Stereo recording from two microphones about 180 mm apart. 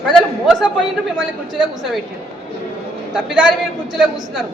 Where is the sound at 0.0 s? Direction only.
Centre (ahead or behind).